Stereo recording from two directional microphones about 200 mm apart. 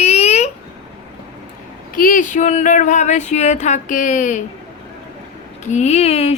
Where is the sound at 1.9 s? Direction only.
40° left (ahead or behind).